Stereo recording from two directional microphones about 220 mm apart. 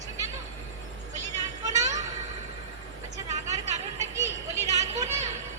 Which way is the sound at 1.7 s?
15° right (ahead or behind).